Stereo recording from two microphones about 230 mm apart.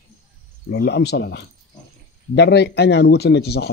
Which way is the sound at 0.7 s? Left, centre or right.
Left.